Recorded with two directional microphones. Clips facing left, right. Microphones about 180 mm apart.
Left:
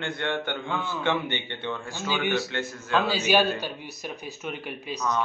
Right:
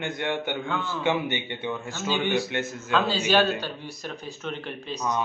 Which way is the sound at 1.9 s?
15° left (ahead or behind).